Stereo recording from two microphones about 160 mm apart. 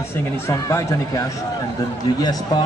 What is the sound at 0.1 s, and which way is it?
Speech, 20° left (ahead or behind).